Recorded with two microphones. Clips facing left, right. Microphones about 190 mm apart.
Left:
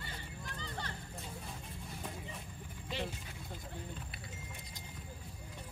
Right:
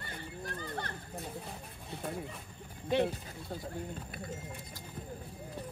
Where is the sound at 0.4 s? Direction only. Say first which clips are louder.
Right 6 dB; 50° right (ahead or behind).